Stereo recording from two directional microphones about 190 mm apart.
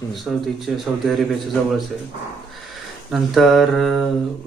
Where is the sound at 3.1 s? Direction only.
Centre (ahead or behind).